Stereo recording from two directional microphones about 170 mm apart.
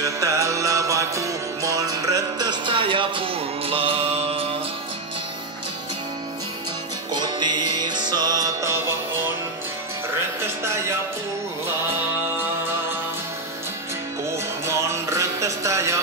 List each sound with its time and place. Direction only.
0.0 s music: 20° right (ahead or behind); by 4.5 s 35° right (ahead or behind)
7.1 s music: 25° right (ahead or behind)
14.7 s music: 15° right (ahead or behind)